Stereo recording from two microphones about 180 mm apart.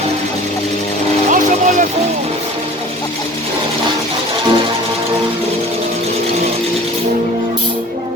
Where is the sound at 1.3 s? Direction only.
45° right (ahead or behind).